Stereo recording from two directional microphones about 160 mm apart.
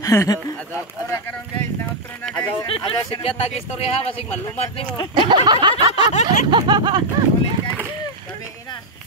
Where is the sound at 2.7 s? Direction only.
35° left (ahead or behind).